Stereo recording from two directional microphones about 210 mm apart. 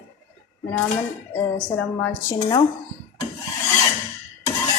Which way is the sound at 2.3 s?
20° left (ahead or behind).